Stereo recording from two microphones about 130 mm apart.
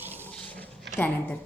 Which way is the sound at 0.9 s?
10° left (ahead or behind).